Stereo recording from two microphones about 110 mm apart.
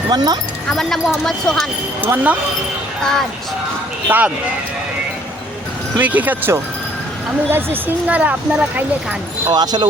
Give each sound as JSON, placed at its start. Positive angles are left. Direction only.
{"t": 0.1, "sound": "speech", "side_deg": -40}
{"t": 0.7, "sound": "speech", "side_deg": 5}
{"t": 2.0, "sound": "speech", "side_deg": -15}
{"t": 4.1, "sound": "speech", "side_deg": -15}
{"t": 6.0, "sound": "speech", "side_deg": -15}
{"t": 9.5, "sound": "speech", "side_deg": -40}